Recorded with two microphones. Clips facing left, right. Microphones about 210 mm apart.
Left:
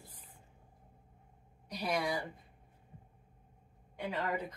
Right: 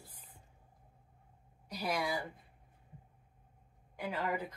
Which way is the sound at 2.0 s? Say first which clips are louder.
Left 2 dB; 25° left (ahead or behind).